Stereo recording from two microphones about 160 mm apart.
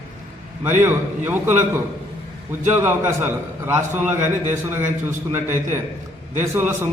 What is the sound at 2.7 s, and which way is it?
A man's voice, 15° right (ahead or behind).